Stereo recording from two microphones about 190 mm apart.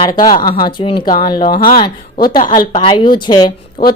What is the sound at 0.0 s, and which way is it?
A woman's voice, 20° left (ahead or behind).